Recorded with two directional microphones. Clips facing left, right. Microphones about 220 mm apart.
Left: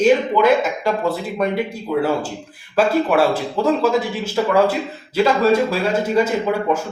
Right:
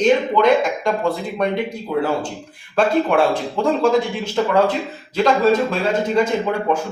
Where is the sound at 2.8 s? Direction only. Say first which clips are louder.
Even; 5° left (ahead or behind).